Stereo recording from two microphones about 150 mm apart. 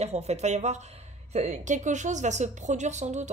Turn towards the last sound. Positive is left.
turn(degrees=-50)  # may be behind; listen again after turning